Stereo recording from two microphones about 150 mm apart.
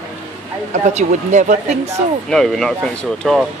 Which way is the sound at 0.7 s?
50° right (ahead or behind).